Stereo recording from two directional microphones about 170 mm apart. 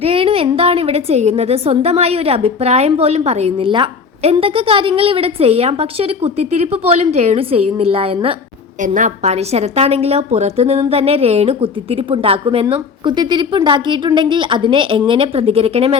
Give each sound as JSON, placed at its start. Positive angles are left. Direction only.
{"t": 0.0, "sound": "a woman's voice", "side_deg": -35}
{"t": 8.8, "sound": "a woman's voice", "side_deg": -45}